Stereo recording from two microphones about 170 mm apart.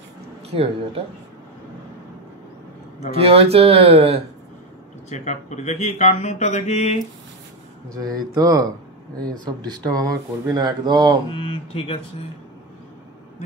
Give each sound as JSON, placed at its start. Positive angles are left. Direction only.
{"t": 0.5, "sound": "speech", "side_deg": -35}
{"t": 3.1, "sound": "speech", "side_deg": -35}
{"t": 5.1, "sound": "speech", "side_deg": 45}
{"t": 8.0, "sound": "speech", "side_deg": -55}
{"t": 8.4, "sound": "speech", "side_deg": -20}
{"t": 11.3, "sound": "speech", "side_deg": 30}